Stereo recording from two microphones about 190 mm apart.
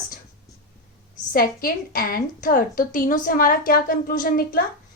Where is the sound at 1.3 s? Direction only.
50° left (ahead or behind).